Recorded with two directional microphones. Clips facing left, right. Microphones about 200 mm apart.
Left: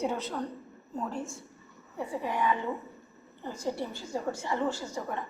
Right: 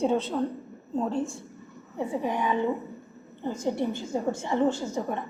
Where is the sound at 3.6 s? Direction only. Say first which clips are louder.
Right 5 dB; 20° right (ahead or behind).